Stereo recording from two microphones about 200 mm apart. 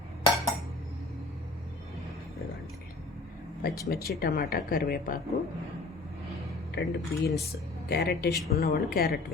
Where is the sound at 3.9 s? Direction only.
50° left (ahead or behind).